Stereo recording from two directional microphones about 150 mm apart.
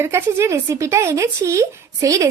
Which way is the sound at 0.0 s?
15° right (ahead or behind).